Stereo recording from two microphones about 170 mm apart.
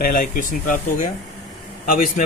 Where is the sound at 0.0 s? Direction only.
55° left (ahead or behind).